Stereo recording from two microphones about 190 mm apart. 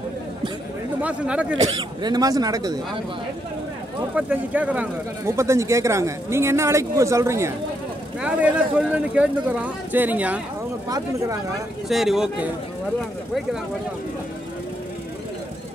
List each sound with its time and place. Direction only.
1.0 s speech: 5° right (ahead or behind)
1.6 s speech: 25° right (ahead or behind)
4.1 s speech: 5° right (ahead or behind)
11.9 s speech: centre (ahead or behind)